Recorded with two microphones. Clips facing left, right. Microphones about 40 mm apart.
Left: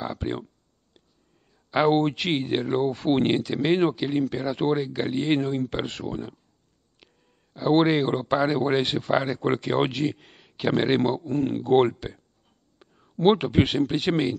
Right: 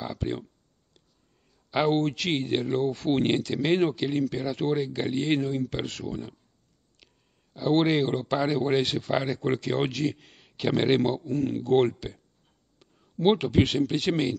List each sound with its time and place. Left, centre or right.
0.1 s speech: left
1.9 s speech: left
2.3 s speech: centre
2.8 s speech: left
4.4 s speech: left
4.7 s speech: centre
5.7 s speech: left
7.5 s speech: centre
9.1 s speech: centre
9.4 s speech: left
10.1 s speech: centre
11.2 s speech: left; by 12.2 s centre
12.7 s a sound: centre
13.2 s speech: centre